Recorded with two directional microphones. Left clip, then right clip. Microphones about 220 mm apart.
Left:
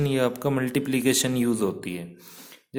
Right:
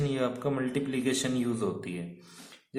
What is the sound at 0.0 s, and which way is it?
A man's voice, 45° left (ahead or behind).